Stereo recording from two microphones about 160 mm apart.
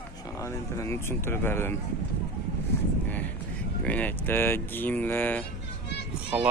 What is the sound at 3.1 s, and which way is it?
Vehicle, 10° left (ahead or behind).